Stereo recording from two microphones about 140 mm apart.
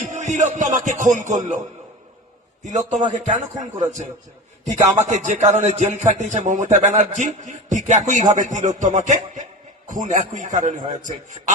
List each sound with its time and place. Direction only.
0.0 s a man's voice: 60° right (ahead or behind)
2.6 s a man's voice: 60° right (ahead or behind)